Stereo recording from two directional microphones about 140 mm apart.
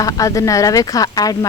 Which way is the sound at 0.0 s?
25° left (ahead or behind).